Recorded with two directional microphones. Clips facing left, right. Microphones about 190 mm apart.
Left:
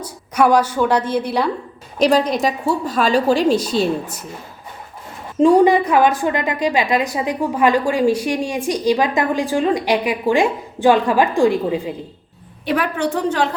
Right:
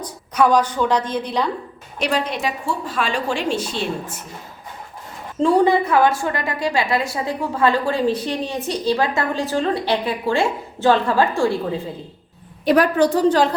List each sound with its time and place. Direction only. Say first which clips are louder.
0.0 s a woman's voice: left 2 dB; 10° left (ahead or behind)
2.0 s a woman's voice: left 7 dB; 40° left (ahead or behind)
5.4 s a woman's voice: left 4 dB; 15° left (ahead or behind)
12.6 s a woman's voice: right 4 dB; 40° right (ahead or behind)